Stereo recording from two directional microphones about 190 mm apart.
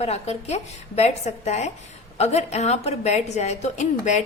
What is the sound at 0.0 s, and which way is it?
A woman's voice, 35° left (ahead or behind).